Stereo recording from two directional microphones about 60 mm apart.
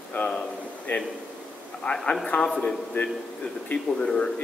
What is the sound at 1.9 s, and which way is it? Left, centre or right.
Speech, left.